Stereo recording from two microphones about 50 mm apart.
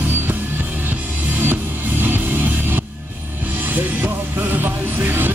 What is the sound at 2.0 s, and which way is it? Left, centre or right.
Music, right.